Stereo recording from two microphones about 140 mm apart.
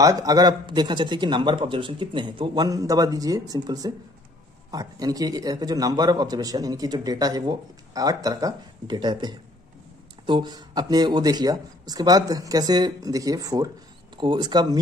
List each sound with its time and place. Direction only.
0.0 s a man's voice: 25° right (ahead or behind)